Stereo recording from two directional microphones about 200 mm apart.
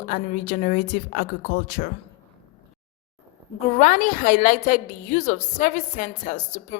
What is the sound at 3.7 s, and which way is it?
A woman's voice, 40° left (ahead or behind).